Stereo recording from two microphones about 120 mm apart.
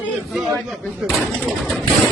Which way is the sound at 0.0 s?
Centre (ahead or behind).